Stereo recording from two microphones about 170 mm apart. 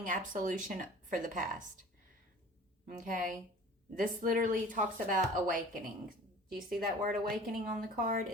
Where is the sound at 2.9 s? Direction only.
50° right (ahead or behind).